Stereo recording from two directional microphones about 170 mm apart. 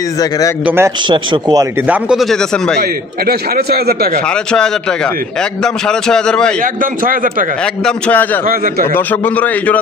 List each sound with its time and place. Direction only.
0.7 s a man's voice: 15° right (ahead or behind)
1.0 s speech: 25° right (ahead or behind)
1.9 s a man's voice: 5° right (ahead or behind)
2.8 s a man's voice: 65° right (ahead or behind)
4.3 s a man's voice: 5° left (ahead or behind)
6.6 s a man's voice: 55° right (ahead or behind)
7.8 s a man's voice: 10° left (ahead or behind)